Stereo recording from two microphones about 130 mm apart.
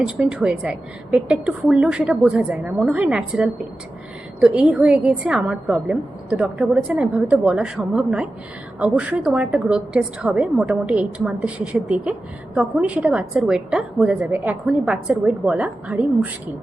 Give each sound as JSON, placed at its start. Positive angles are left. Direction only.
{"t": 0.0, "sound": "a woman's voice", "side_deg": -10}